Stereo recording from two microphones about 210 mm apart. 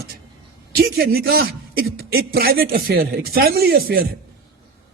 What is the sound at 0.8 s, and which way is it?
A man's voice, 50° right (ahead or behind).